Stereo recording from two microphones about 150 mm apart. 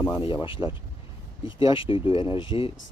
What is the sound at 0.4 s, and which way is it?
Speech, 35° left (ahead or behind).